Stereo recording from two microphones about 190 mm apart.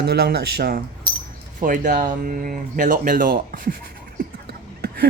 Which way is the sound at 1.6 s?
45° right (ahead or behind).